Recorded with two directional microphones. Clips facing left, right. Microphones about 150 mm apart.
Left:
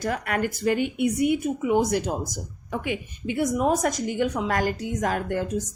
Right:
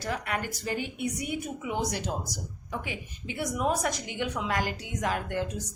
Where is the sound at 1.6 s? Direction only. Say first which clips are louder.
Left 10 dB; 50° left (ahead or behind).